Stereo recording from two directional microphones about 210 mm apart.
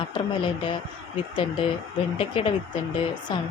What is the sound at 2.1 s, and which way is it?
A woman's voice, 25° left (ahead or behind).